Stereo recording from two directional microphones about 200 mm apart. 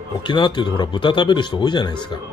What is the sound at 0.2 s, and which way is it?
Speech, 25° left (ahead or behind).